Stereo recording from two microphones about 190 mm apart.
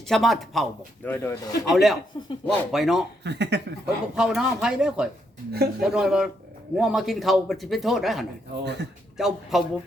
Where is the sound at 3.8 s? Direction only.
5° right (ahead or behind).